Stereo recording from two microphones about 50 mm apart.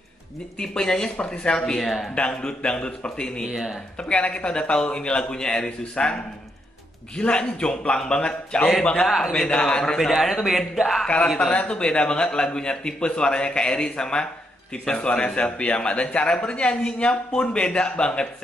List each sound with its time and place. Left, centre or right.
0.6 s a man's voice: centre
1.8 s a man's voice: centre
2.0 s a man's voice: centre
3.4 s speech: centre
4.0 s a man's voice: left
7.2 s a man's voice: centre
9.9 s a man's voice: centre
11.3 s a man's voice: centre